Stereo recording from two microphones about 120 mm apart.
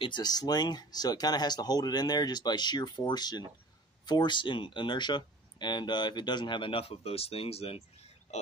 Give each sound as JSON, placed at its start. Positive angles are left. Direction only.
{"t": 0.0, "sound": "speech", "side_deg": 35}
{"t": 8.3, "sound": "speech", "side_deg": 70}